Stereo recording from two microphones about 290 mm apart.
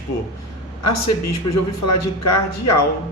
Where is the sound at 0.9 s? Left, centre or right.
Left.